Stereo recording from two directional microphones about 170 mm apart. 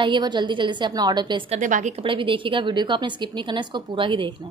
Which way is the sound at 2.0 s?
30° right (ahead or behind).